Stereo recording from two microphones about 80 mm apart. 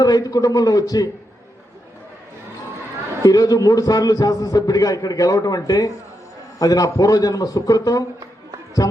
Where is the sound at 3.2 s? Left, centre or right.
Left.